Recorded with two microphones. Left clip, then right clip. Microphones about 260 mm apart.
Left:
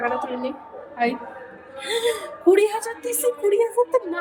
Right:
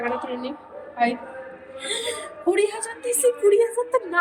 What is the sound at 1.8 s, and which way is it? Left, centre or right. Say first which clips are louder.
A woman's voice: left 5 dB; centre.